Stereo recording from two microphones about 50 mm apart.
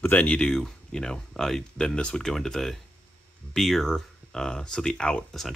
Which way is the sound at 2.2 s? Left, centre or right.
Centre.